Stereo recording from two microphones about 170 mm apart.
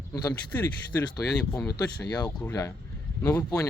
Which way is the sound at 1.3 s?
5° left (ahead or behind).